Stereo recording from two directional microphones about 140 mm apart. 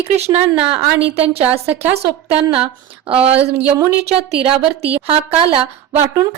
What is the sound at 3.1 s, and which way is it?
Speech, 45° right (ahead or behind).